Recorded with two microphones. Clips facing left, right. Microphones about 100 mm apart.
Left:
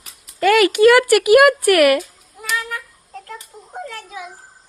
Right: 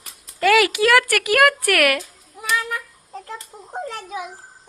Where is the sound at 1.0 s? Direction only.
10° left (ahead or behind).